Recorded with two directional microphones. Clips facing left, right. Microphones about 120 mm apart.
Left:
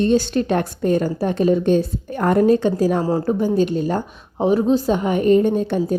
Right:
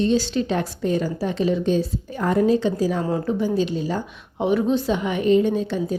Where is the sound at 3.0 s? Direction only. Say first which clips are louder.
Left 4 dB; 35° left (ahead or behind).